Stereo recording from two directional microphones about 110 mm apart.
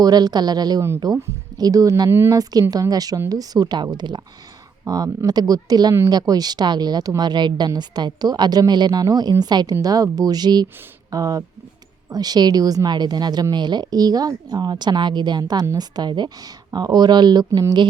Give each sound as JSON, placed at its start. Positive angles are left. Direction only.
{"t": 0.0, "sound": "a woman's voice", "side_deg": -35}
{"t": 2.3, "sound": "a woman's voice", "side_deg": -35}